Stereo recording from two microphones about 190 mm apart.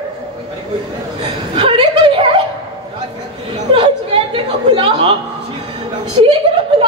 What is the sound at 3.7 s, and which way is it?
Chuckle, 25° right (ahead or behind).